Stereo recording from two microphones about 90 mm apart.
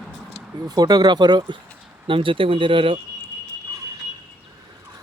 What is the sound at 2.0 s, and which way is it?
Speech, 75° right (ahead or behind).